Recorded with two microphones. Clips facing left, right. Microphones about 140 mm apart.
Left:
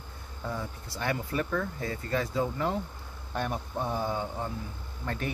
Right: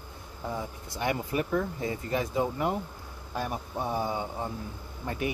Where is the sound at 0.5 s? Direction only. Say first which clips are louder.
Right 1 dB; 15° right (ahead or behind).